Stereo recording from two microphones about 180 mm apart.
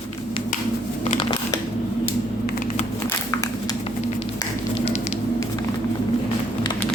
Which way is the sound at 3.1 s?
15° left (ahead or behind).